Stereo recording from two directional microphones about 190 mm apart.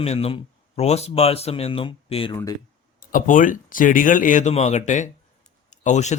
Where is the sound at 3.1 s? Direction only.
45° left (ahead or behind).